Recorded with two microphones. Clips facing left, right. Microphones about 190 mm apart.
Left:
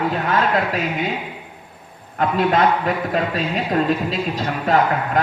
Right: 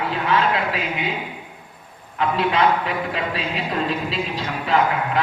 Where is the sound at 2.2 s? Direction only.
45° left (ahead or behind).